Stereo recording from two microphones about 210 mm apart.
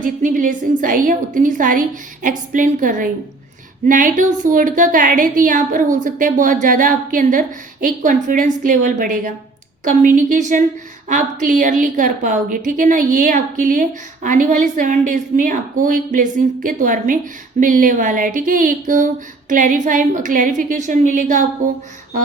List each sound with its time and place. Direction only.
0.0 s a woman's voice: 40° right (ahead or behind)